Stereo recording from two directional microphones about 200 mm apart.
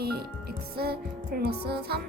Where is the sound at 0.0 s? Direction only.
50° right (ahead or behind).